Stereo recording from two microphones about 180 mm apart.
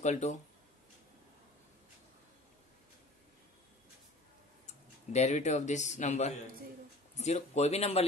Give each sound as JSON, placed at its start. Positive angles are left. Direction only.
{"t": 0.0, "sound": "speech", "side_deg": 40}
{"t": 5.1, "sound": "speech", "side_deg": 40}